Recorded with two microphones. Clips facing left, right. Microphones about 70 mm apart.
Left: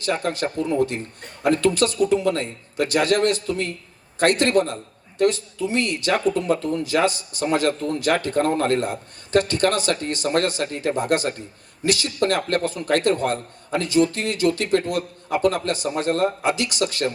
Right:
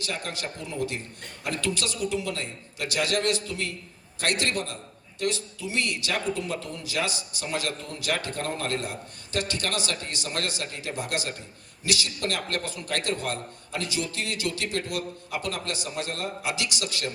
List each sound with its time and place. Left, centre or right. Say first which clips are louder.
0.0 s a man's voice: left 10 dB; left